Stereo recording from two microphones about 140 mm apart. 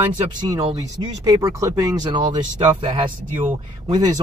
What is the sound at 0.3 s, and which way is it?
Speech, 30° right (ahead or behind).